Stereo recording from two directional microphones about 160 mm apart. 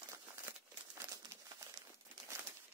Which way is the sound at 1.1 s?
20° right (ahead or behind).